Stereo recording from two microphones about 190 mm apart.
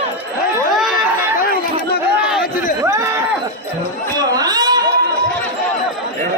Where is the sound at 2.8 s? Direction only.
15° right (ahead or behind).